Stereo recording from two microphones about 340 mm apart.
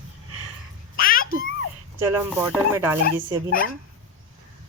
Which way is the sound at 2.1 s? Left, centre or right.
Centre.